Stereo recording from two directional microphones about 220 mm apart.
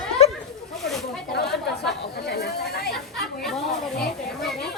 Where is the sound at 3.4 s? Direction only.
Centre (ahead or behind).